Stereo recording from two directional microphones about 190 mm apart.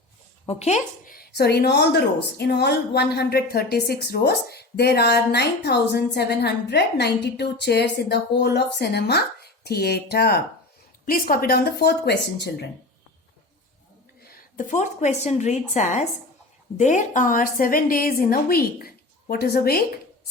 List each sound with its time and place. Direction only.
0.4 s speech: 35° left (ahead or behind)
1.1 s speech: 55° left (ahead or behind)
14.2 s a woman's voice: 40° left (ahead or behind)